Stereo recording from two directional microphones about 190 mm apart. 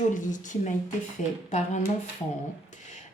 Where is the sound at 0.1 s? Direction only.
40° left (ahead or behind).